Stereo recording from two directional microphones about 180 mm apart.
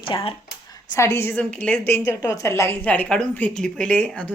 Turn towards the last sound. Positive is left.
turn(degrees=10)  # may be behind; listen again after turning